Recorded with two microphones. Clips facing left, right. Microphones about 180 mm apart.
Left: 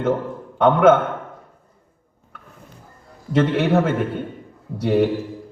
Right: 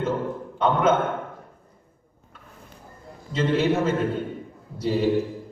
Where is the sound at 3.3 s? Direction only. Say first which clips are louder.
Left 4 dB; 65° left (ahead or behind).